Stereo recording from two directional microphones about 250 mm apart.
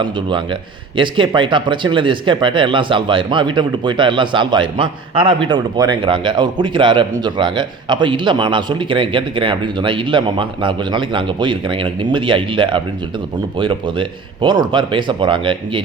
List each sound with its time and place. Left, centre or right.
0.0 s speech: centre